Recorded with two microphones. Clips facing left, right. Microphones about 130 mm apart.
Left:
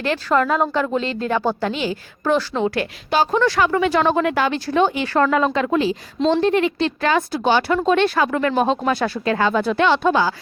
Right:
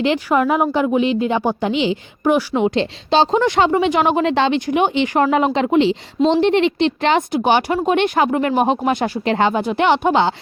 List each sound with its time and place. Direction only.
0.0 s speech: 15° right (ahead or behind)